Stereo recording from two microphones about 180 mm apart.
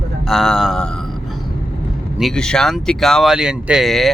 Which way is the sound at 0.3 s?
Centre (ahead or behind).